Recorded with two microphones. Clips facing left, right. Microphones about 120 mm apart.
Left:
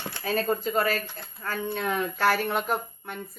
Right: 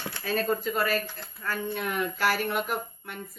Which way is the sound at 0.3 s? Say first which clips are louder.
Left 1 dB; 30° left (ahead or behind).